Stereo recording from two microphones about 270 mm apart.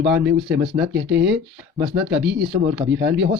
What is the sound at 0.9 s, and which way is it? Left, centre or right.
Speech, right.